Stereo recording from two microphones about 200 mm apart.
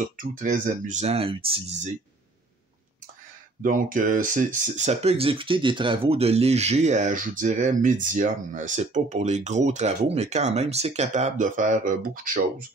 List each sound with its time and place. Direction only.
0.2 s speech: 40° right (ahead or behind)
3.6 s speech: 45° right (ahead or behind)